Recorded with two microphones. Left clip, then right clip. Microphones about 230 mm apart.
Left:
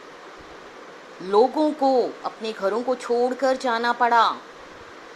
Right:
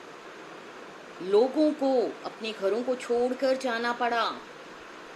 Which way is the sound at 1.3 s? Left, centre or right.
Left.